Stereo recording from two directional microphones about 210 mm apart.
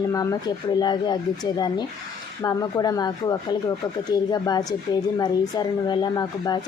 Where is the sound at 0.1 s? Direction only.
15° left (ahead or behind).